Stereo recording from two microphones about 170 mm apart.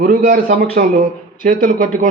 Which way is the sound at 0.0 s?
55° right (ahead or behind).